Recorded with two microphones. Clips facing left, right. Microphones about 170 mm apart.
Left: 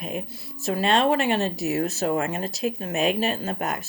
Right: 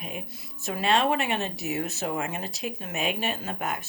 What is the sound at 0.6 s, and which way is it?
Speech, 35° left (ahead or behind).